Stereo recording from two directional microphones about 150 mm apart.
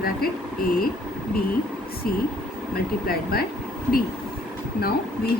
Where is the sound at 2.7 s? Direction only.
90° left.